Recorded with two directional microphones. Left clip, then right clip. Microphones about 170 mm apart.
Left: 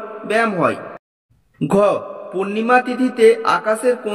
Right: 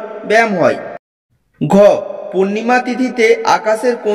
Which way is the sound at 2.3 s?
20° right (ahead or behind).